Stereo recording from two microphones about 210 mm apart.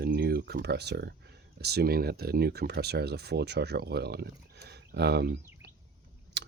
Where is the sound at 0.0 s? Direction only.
50° right (ahead or behind).